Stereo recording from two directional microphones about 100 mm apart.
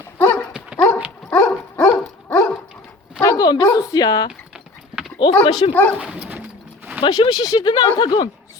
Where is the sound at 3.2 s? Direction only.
45° left (ahead or behind).